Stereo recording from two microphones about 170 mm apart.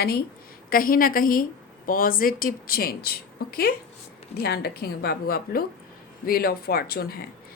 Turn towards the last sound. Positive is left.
turn(degrees=65)  # may be behind; listen again after turning